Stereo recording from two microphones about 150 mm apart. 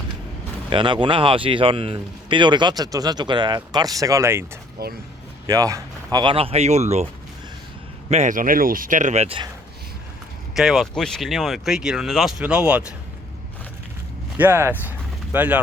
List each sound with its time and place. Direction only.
0.7 s speech: 30° right (ahead or behind)
4.8 s speech: 85° right
5.5 s speech: 25° right (ahead or behind); by 7.1 s 45° right (ahead or behind)
8.1 s speech: 55° right (ahead or behind)
10.5 s speech: centre (ahead or behind)
14.3 s speech: 15° right (ahead or behind)